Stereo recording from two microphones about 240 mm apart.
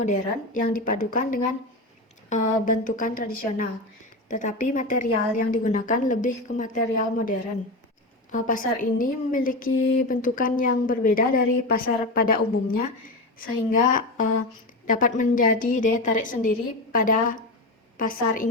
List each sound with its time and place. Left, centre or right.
0.0 s a woman's voice: left